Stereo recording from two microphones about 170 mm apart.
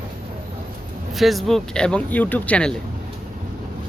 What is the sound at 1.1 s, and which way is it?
Speech, centre (ahead or behind).